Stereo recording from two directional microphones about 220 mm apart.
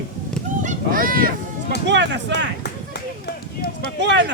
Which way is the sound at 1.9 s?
55° right (ahead or behind).